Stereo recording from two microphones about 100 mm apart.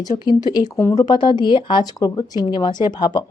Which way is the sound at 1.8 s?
40° left (ahead or behind).